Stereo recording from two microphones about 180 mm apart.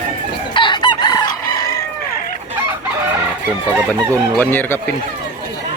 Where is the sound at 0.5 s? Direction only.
25° left (ahead or behind).